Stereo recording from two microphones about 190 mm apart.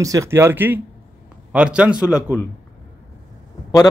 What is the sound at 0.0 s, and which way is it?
A man's voice, 15° right (ahead or behind).